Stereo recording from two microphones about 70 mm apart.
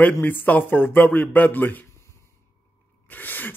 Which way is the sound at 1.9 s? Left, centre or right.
Left.